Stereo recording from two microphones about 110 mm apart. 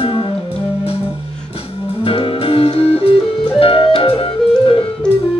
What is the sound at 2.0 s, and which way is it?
Music, 55° left (ahead or behind).